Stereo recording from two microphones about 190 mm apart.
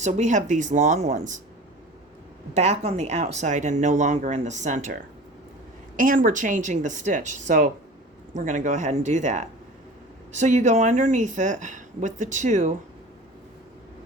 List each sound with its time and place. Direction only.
0.0 s speech: 40° right (ahead or behind)
2.6 s speech: 35° right (ahead or behind)
6.0 s speech: 45° right (ahead or behind)